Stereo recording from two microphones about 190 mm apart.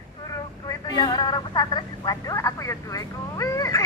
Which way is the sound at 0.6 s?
20° left (ahead or behind).